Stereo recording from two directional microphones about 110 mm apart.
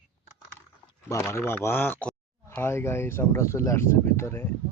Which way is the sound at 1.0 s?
25° left (ahead or behind).